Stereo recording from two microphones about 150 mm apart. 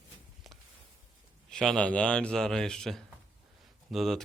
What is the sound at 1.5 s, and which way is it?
A man's voice, 5° left (ahead or behind).